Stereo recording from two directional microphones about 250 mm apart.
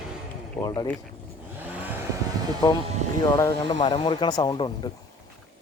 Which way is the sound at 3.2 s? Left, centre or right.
Centre.